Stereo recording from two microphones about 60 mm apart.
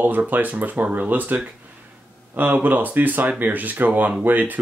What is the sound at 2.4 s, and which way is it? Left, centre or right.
Speech, right.